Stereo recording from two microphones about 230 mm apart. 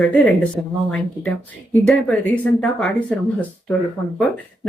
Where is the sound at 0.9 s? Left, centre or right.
Centre.